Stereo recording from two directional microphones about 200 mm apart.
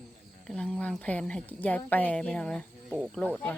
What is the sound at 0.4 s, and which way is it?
A woman's voice, 5° left (ahead or behind).